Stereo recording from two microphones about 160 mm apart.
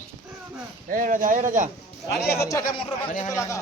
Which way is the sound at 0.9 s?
55° right (ahead or behind).